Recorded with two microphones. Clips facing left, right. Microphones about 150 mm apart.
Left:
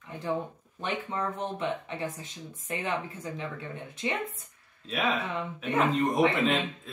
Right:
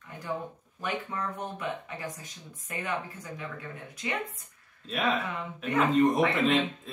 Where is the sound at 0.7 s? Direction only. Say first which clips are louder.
Left 1 dB; 25° left (ahead or behind).